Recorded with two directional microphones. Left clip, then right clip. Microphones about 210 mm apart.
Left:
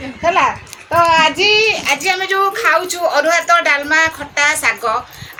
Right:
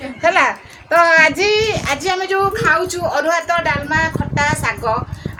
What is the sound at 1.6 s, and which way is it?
A woman's voice, 20° right (ahead or behind).